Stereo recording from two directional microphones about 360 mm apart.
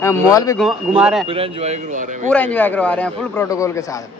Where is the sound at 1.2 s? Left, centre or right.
Centre.